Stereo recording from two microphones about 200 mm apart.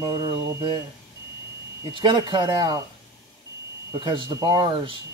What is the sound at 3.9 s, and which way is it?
Speech, 20° right (ahead or behind).